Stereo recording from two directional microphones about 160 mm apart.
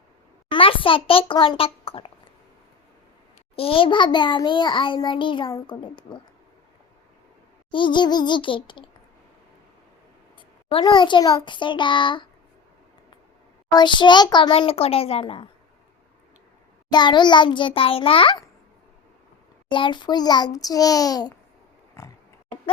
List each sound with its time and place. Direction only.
0.5 s a child's voice: 35° left (ahead or behind)
3.5 s a child's voice: 35° left (ahead or behind)
7.7 s a child's voice: 30° left (ahead or behind)
10.7 s a child's voice: 30° left (ahead or behind)
13.7 s a child's voice: 25° left (ahead or behind)
16.9 s a child's voice: 30° left (ahead or behind)
19.7 s a child's voice: 30° left (ahead or behind)
22.0 s oink: 15° left (ahead or behind)